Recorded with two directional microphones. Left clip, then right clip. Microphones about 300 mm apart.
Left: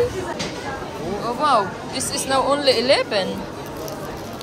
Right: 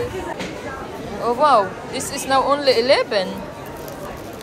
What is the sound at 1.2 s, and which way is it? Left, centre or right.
Speech, centre.